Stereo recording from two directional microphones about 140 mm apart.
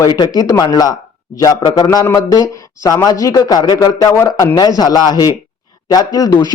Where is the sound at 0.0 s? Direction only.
30° left (ahead or behind).